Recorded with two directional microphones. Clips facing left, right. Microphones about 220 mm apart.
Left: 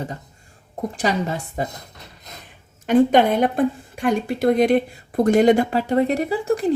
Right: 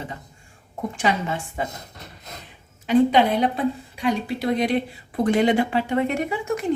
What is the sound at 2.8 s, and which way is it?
Speech, 50° left (ahead or behind).